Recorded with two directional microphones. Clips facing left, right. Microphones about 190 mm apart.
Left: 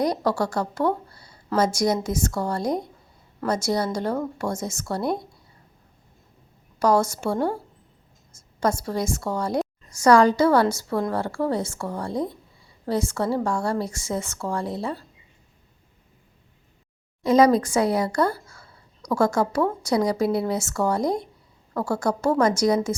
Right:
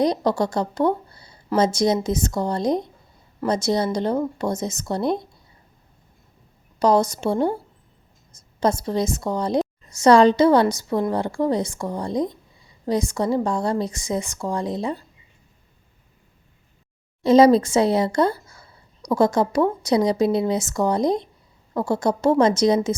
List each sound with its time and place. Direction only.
0.0 s a woman's voice: 20° right (ahead or behind)
6.7 s a woman's voice: 20° right (ahead or behind)
17.2 s speech: 25° right (ahead or behind)